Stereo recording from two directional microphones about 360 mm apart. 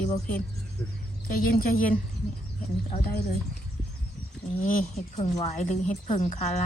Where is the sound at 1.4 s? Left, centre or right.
Left.